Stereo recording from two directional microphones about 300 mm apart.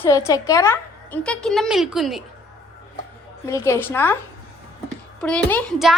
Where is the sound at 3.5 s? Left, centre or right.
Centre.